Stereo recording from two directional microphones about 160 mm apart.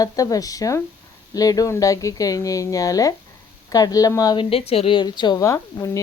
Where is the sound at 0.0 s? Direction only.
20° left (ahead or behind).